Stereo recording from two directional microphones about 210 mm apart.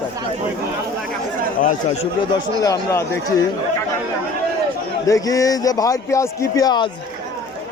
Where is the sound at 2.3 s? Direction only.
15° left (ahead or behind).